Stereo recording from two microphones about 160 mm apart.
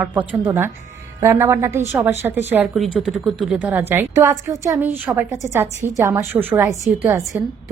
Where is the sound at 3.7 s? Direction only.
15° right (ahead or behind).